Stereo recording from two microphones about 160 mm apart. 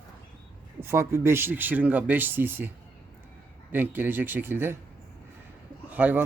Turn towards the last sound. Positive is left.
turn(degrees=-10)  # may be behind; listen again after turning